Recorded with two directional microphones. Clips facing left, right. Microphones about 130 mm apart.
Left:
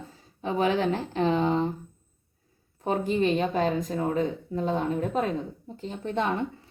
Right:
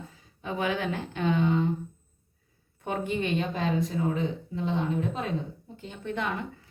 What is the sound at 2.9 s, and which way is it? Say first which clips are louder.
A woman's voice: left 5 dB; 35° left (ahead or behind).